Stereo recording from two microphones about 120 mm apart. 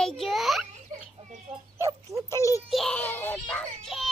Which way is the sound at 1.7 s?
25° right (ahead or behind).